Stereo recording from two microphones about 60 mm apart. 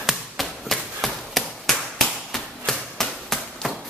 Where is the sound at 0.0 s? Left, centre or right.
Centre.